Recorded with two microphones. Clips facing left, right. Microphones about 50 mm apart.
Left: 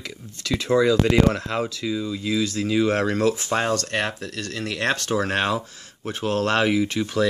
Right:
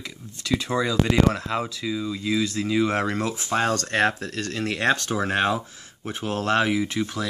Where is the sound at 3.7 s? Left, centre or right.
Right.